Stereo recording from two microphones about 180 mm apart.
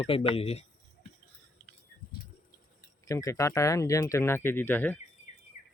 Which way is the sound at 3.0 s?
20° left (ahead or behind).